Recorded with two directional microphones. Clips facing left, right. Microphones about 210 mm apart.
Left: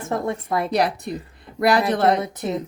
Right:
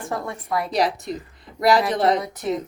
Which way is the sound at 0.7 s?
60° left (ahead or behind).